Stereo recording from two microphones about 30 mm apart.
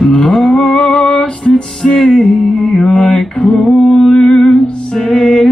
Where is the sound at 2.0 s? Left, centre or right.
Centre.